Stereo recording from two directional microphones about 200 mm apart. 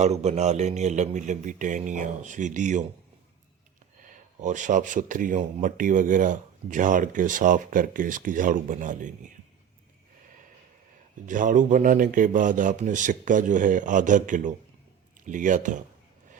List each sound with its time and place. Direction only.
0.0 s speech: 35° right (ahead or behind)
4.0 s speech: 40° right (ahead or behind)
11.3 s speech: 40° right (ahead or behind)